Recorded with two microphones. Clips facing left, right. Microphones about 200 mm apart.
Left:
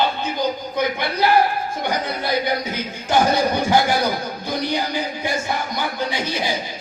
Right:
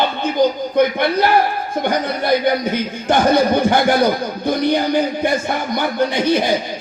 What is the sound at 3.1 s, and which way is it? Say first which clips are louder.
Speech: right 4 dB; 55° right (ahead or behind).